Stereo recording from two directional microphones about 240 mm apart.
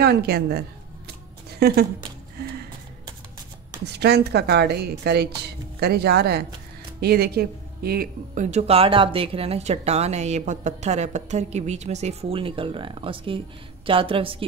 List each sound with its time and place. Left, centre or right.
0.0 s a woman's voice: right
2.4 s music: right
3.8 s speech: right